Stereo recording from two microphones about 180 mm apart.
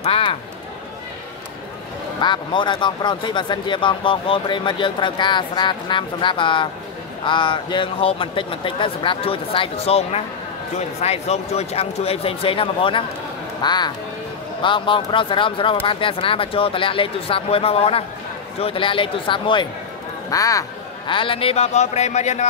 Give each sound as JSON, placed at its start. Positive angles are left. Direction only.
{"t": 0.0, "sound": "a sound", "side_deg": 30}
{"t": 2.2, "sound": "speech", "side_deg": 25}
{"t": 21.1, "sound": "speech", "side_deg": 30}